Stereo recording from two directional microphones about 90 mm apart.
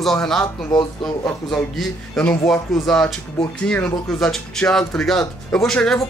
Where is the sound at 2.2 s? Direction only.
5° left (ahead or behind).